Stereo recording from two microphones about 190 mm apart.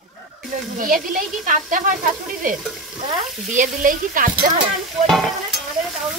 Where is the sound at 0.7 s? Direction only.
45° right (ahead or behind).